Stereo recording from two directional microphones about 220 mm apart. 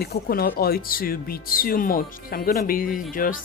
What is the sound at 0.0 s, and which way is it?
Speech, 45° left (ahead or behind).